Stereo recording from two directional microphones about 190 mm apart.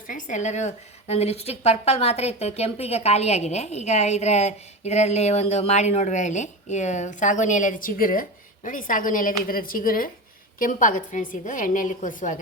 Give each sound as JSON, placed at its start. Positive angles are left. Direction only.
{"t": 0.1, "sound": "a woman's voice", "side_deg": 40}